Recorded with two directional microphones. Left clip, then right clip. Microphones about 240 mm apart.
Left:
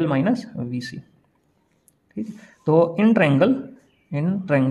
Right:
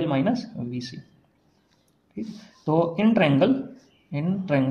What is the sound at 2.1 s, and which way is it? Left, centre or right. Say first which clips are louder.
Speech: left 3 dB; left.